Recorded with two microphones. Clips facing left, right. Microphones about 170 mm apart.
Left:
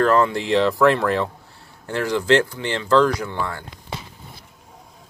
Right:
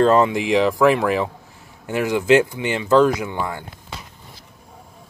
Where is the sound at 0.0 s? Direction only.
20° right (ahead or behind).